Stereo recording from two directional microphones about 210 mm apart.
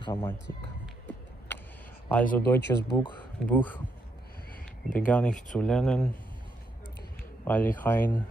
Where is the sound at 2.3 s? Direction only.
10° left (ahead or behind).